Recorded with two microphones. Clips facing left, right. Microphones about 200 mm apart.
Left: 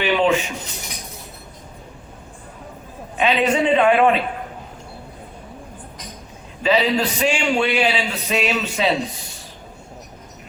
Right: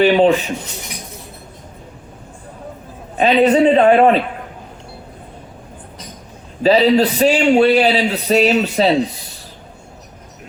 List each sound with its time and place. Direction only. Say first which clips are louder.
0.0 s a man's voice: right 6 dB; 35° right (ahead or behind)
3.2 s a man's voice: right 6 dB; 35° right (ahead or behind)
6.6 s a man's voice: right 7 dB; 35° right (ahead or behind)